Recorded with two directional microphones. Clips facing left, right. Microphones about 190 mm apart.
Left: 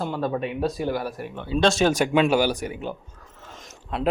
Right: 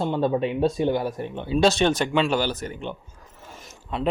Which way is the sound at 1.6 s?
Centre (ahead or behind).